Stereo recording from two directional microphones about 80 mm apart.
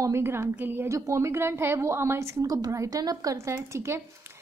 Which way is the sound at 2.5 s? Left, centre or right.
Right.